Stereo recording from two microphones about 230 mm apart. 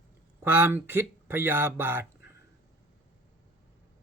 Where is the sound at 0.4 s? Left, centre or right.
Centre.